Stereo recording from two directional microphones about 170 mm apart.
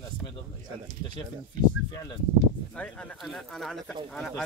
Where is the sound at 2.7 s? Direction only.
5° left (ahead or behind).